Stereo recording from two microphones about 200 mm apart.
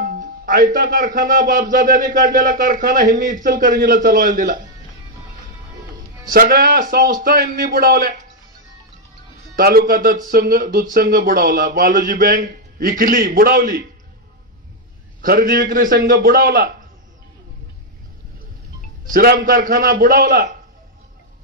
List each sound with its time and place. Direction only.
0.0 s speech: 45° right (ahead or behind)
6.3 s speech: 45° right (ahead or behind)
9.6 s speech: 45° right (ahead or behind)
15.2 s speech: 45° right (ahead or behind)
19.1 s speech: 50° right (ahead or behind)